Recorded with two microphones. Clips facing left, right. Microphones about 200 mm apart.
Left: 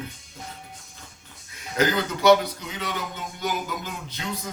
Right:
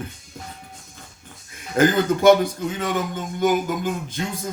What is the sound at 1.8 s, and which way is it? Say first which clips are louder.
Speech: right 6 dB; 50° right (ahead or behind).